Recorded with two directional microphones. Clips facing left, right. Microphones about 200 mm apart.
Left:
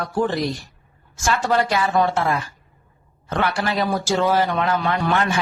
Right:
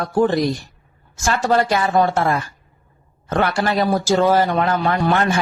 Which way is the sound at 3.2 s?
45° right (ahead or behind).